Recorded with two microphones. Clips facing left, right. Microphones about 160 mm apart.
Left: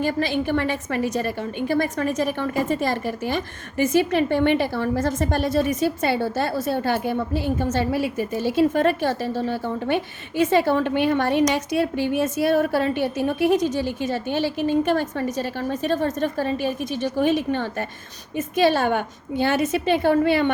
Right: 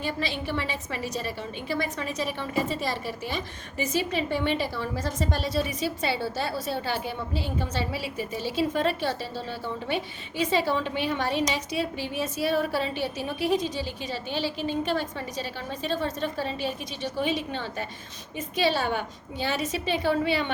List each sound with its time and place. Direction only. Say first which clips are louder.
0.0 s a woman's voice: left 8 dB; 50° left (ahead or behind)